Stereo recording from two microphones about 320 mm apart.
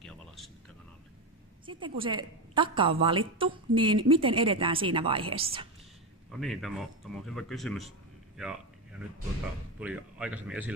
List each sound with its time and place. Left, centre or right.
0.0 s a sound: centre
2.0 s a woman's voice: centre
6.4 s speech: centre
9.8 s speech: centre